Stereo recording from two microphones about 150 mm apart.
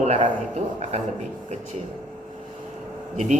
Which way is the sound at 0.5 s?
45° right (ahead or behind).